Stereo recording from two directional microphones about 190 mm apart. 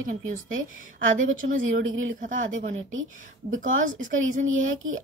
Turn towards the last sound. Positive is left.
turn(degrees=-90)